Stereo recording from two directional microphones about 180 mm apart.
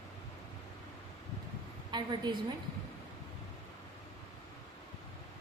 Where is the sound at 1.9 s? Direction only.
25° right (ahead or behind).